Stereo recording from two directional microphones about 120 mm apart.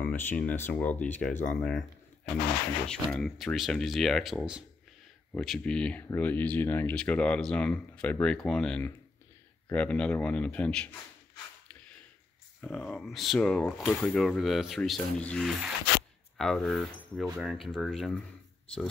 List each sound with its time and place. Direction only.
0.0 s speech: 15° left (ahead or behind)
2.9 s speech: 5° left (ahead or behind)
12.5 s speech: 5° left (ahead or behind)